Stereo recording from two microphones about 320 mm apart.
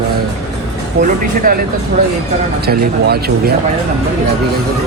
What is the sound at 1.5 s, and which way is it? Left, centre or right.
Speech, right.